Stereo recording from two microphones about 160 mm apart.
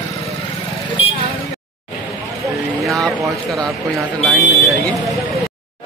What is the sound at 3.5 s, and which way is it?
Speech, centre (ahead or behind).